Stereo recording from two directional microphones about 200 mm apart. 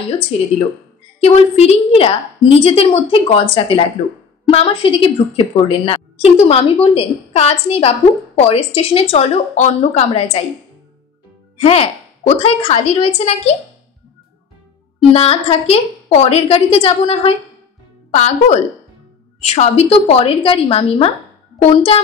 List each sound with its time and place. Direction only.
0.3 s a woman's voice: 30° left (ahead or behind)
11.5 s speech: 30° left (ahead or behind)
15.0 s a woman's voice: 30° left (ahead or behind)